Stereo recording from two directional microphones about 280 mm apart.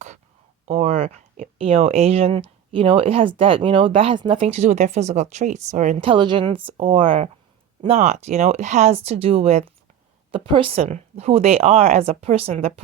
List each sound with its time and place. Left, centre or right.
0.6 s speech: right